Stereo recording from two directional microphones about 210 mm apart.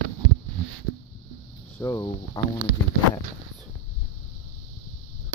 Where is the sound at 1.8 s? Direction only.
15° left (ahead or behind).